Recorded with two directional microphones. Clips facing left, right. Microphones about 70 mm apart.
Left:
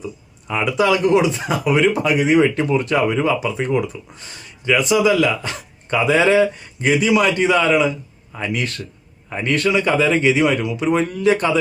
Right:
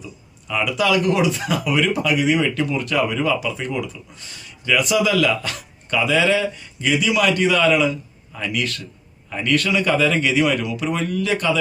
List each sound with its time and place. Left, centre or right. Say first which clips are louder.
0.4 s a man's voice: left 3 dB; left